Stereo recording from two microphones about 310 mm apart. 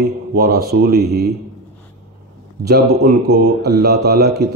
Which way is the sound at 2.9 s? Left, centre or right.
Right.